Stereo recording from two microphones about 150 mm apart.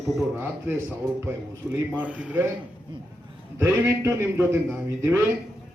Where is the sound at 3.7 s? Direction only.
15° right (ahead or behind).